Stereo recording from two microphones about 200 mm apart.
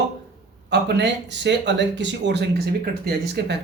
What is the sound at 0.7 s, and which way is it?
Speech, 60° right (ahead or behind).